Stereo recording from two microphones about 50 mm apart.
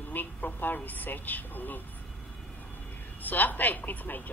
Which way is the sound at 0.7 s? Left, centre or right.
Left.